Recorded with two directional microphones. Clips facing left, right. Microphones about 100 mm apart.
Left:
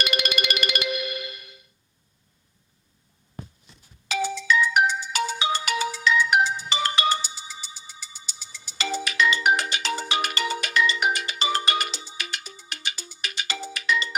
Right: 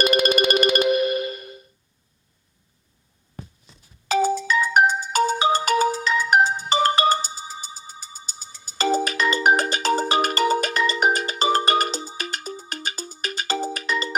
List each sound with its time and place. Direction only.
0.0 s music: 40° right (ahead or behind)
4.1 s ringtone: 40° right (ahead or behind)